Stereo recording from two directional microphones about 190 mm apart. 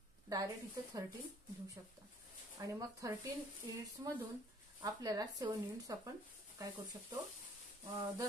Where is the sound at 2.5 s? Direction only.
15° right (ahead or behind).